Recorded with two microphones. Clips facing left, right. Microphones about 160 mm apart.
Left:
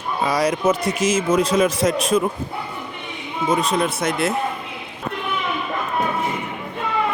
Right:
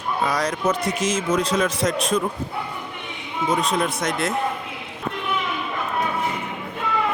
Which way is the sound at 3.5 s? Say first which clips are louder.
Left 2 dB; centre (ahead or behind).